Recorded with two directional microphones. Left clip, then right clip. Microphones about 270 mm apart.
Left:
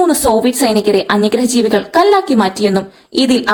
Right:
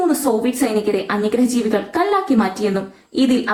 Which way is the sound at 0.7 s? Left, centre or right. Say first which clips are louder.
Left 7 dB; left.